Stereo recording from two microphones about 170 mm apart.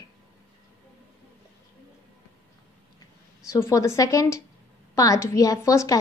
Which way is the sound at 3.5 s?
20° left (ahead or behind).